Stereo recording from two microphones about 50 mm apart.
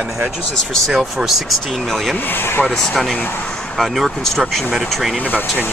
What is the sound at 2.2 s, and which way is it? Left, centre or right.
Speech, left.